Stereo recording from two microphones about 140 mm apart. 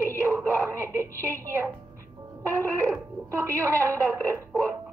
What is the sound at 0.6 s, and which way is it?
Speech, 20° right (ahead or behind).